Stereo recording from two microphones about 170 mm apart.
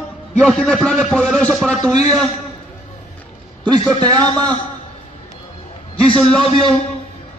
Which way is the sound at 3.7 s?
25° right (ahead or behind).